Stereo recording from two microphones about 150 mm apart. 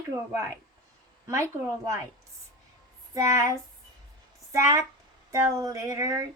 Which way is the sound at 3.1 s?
20° right (ahead or behind).